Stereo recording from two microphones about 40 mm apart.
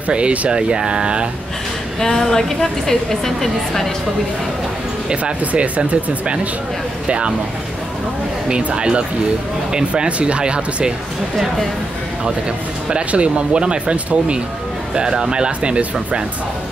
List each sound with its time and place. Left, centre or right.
0.1 s speech: right
0.5 s speech: right
2.0 s a woman's voice: centre
5.1 s speech: right
8.5 s speech: right
10.0 s speech: right
12.9 s speech: right